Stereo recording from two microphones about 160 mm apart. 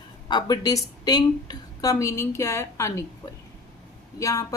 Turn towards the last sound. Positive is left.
turn(degrees=20)  # may be behind; listen again after turning